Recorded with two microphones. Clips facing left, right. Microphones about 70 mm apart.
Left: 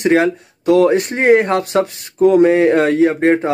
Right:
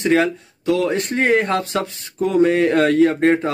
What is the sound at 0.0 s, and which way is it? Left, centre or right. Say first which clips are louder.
Speech: left 3 dB; left.